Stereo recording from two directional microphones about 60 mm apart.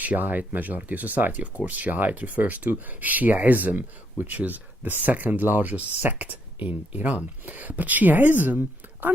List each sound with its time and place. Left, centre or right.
0.0 s speech: right